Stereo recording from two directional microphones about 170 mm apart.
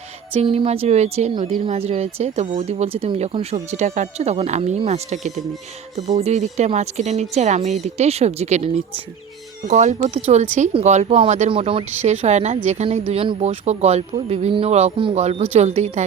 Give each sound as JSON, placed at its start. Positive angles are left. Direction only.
{"t": 0.3, "sound": "speech", "side_deg": -35}